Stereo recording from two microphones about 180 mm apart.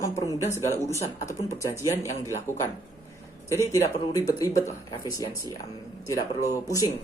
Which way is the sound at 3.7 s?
20° left (ahead or behind).